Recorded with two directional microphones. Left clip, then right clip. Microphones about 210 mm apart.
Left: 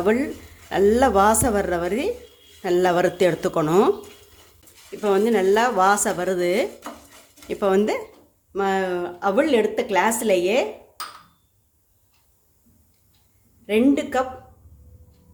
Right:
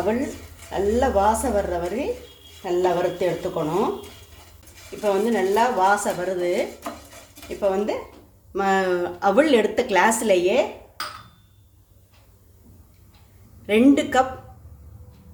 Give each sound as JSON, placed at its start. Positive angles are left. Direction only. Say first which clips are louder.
{"t": 0.7, "sound": "speech", "louder": "left 4 dB", "side_deg": 40}
{"t": 5.0, "sound": "speech", "louder": "left 2 dB", "side_deg": 35}
{"t": 8.5, "sound": "a woman's voice", "louder": "right 2 dB", "side_deg": 15}
{"t": 13.7, "sound": "a woman's voice", "louder": "right 2 dB", "side_deg": 5}